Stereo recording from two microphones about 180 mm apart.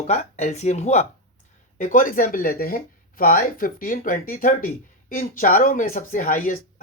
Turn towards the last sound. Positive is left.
turn(degrees=45)  # may be behind; listen again after turning